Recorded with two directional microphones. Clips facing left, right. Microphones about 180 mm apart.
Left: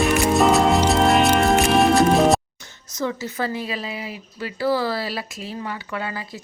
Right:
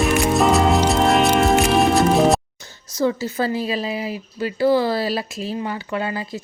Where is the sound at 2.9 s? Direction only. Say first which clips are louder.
Right 5 dB; 30° right (ahead or behind).